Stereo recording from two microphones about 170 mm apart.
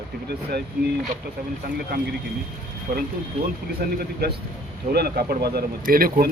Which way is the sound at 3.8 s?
65° right (ahead or behind).